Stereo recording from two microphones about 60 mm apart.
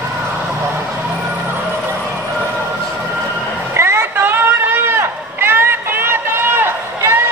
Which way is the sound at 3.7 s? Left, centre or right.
Right.